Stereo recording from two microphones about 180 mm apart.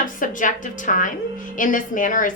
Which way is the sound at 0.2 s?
45° left (ahead or behind).